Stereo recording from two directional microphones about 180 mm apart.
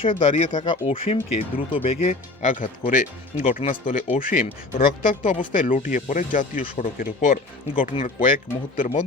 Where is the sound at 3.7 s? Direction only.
50° left (ahead or behind).